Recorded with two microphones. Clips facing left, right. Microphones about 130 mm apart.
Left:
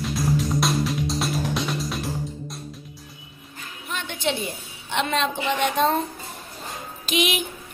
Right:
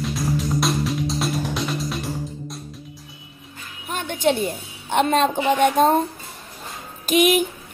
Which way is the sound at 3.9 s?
45° right (ahead or behind).